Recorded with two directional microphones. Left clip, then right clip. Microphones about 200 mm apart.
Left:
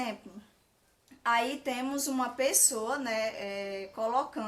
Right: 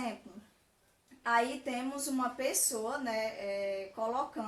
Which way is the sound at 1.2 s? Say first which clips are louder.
Left 2 dB; 45° left (ahead or behind).